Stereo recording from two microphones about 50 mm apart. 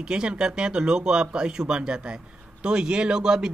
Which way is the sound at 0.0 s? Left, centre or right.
Centre.